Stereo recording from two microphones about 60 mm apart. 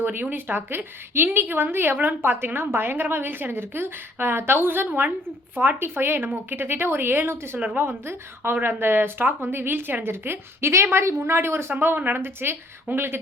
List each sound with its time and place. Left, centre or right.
0.0 s a woman's voice: right
11.7 s a woman's voice: right